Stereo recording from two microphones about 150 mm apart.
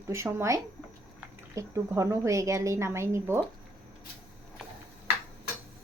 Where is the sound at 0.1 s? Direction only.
20° right (ahead or behind).